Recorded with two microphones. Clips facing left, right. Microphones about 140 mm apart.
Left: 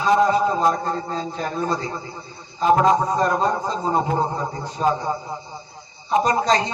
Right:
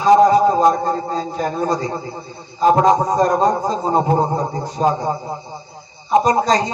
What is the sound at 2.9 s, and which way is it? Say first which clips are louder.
A man's voice: right 4 dB; 40° right (ahead or behind).